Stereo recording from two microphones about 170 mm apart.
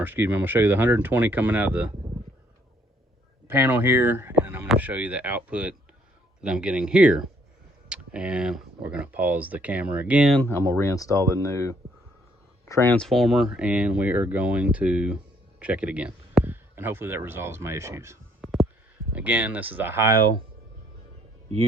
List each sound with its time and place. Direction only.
0.0 s speech: 10° right (ahead or behind)
3.4 s speech: 15° right (ahead or behind)
10.3 s speech: 15° left (ahead or behind); by 18.2 s 15° right (ahead or behind)
18.4 s a sound: centre (ahead or behind)
19.1 s speech: 10° right (ahead or behind)